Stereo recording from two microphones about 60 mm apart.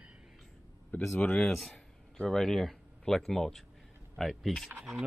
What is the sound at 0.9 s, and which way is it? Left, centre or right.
Speech, left.